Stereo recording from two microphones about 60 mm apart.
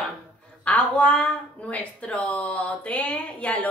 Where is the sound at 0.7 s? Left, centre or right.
Centre.